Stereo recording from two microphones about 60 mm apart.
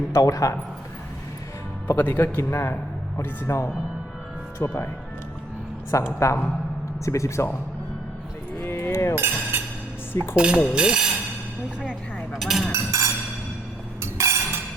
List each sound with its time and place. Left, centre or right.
0.1 s a man's voice: left
1.9 s a man's voice: left
4.6 s speech: left
6.1 s speech: left
8.5 s music: left
8.9 s chink: left
9.1 s chink: right
10.1 s dishes: left
10.3 s speech: centre
12.3 s speech: centre
12.7 s speech: right
14.0 s a sound: right